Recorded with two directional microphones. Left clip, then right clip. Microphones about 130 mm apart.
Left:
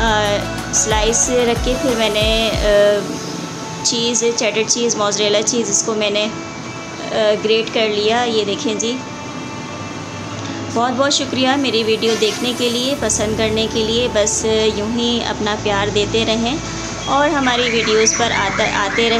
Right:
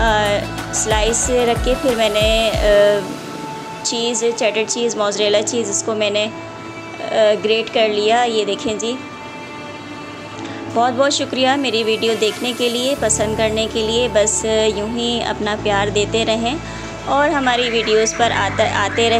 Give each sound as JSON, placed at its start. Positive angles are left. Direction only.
{"t": 0.0, "sound": "music", "side_deg": -35}
{"t": 0.8, "sound": "a woman's voice", "side_deg": -40}
{"t": 10.8, "sound": "a woman's voice", "side_deg": -35}